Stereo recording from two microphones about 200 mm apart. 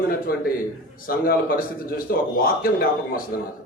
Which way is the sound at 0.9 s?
45° left (ahead or behind).